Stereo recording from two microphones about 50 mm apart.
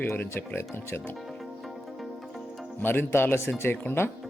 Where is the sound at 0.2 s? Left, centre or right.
Left.